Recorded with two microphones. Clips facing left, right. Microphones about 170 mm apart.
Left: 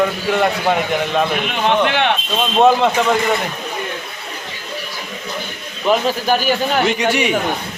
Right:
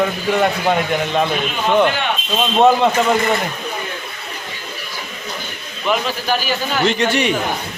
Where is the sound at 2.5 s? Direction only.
Centre (ahead or behind).